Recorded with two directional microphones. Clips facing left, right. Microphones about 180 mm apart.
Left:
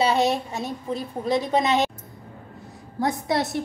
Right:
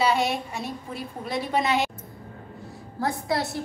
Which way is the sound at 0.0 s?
25° left (ahead or behind).